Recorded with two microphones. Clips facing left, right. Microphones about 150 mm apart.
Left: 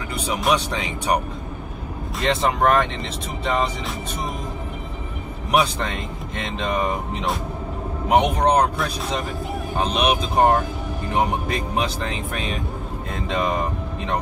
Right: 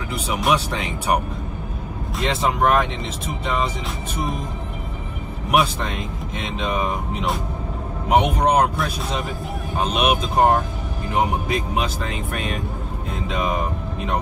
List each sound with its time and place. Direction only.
0.1 s speech: centre (ahead or behind)
5.5 s speech: centre (ahead or behind)